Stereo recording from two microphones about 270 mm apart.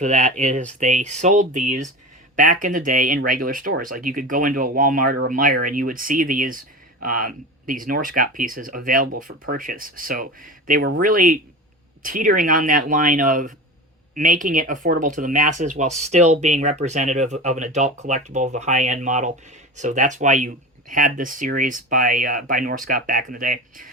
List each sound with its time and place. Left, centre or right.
0.0 s speech: right